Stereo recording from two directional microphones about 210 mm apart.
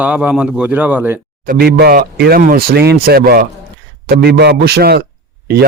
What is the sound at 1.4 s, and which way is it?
A man's voice, 45° right (ahead or behind).